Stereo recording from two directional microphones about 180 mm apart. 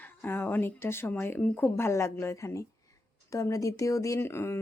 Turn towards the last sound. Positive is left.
turn(degrees=15)  # may be behind; listen again after turning